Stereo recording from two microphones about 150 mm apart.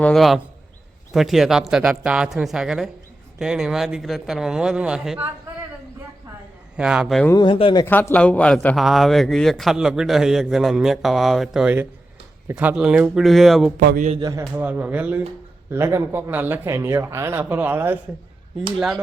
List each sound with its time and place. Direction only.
0.0 s a man's voice: centre (ahead or behind)
6.7 s a man's voice: 5° right (ahead or behind)
7.3 s speech: 35° left (ahead or behind)
7.9 s a man's voice: 10° left (ahead or behind)
13.7 s a man's voice: 65° right (ahead or behind)
14.2 s a man's voice: 25° right (ahead or behind)
14.5 s speech: 10° right (ahead or behind)